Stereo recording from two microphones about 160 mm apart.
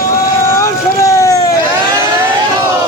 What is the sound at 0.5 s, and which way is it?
Vehicle, 20° left (ahead or behind).